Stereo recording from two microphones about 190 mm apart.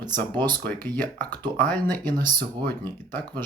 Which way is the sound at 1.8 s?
10° left (ahead or behind).